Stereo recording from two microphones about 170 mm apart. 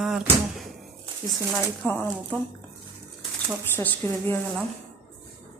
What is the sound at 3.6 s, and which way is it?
Speech, 10° left (ahead or behind).